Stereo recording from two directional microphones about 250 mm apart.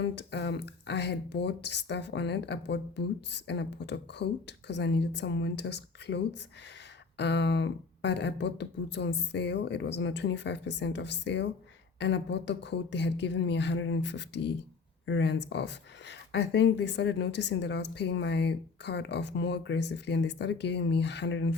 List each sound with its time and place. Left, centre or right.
0.0 s speech: left